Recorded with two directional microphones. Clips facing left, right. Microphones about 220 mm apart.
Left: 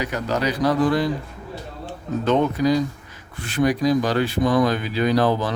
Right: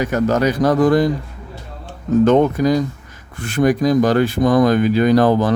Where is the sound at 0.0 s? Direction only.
45° right (ahead or behind).